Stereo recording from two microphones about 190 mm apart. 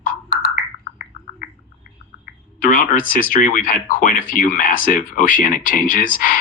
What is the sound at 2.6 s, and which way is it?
Speech, 45° left (ahead or behind).